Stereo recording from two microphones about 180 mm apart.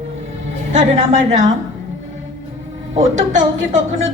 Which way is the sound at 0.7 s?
40° right (ahead or behind).